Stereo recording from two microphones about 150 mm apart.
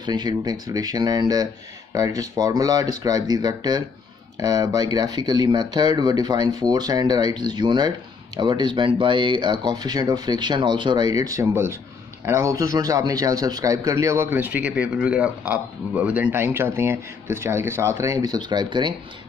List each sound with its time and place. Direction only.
0.0 s speech: 30° right (ahead or behind)